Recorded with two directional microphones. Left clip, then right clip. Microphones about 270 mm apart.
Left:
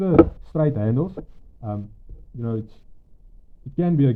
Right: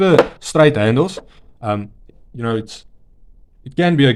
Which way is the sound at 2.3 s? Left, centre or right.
Right.